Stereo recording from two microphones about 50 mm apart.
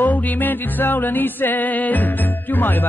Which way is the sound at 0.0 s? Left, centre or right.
Left.